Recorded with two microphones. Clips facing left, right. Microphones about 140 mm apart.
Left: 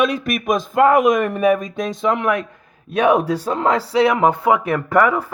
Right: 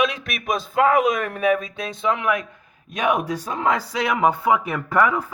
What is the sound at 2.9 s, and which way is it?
Speech, 30° left (ahead or behind).